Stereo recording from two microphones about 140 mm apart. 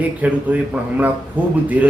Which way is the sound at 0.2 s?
10° right (ahead or behind).